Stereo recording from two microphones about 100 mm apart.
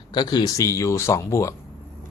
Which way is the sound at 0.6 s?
30° left (ahead or behind).